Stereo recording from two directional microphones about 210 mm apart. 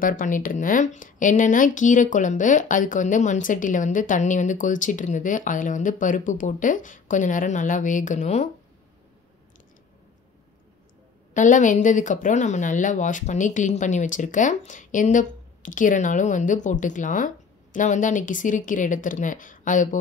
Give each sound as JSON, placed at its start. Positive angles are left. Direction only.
{"t": 0.0, "sound": "speech", "side_deg": 40}
{"t": 11.3, "sound": "speech", "side_deg": 35}